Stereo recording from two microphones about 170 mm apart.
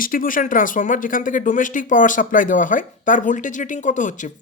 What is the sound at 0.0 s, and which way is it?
Speech, 55° left (ahead or behind).